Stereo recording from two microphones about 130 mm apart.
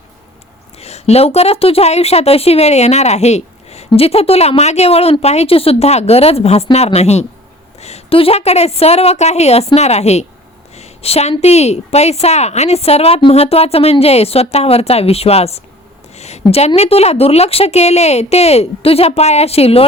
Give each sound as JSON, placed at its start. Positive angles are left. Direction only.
{"t": 0.8, "sound": "a woman's voice", "side_deg": 55}